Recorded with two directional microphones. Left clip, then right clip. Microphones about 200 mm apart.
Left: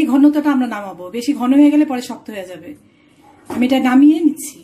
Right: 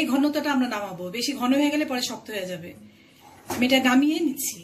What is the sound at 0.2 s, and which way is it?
Speech, 50° left (ahead or behind).